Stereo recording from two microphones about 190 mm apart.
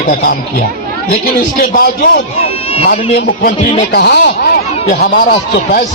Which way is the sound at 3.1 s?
50° left (ahead or behind).